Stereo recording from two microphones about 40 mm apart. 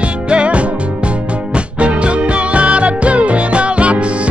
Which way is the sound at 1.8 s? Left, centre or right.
Right.